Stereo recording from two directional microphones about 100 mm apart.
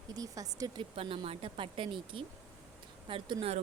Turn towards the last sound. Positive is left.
turn(degrees=-60)  # may be behind; listen again after turning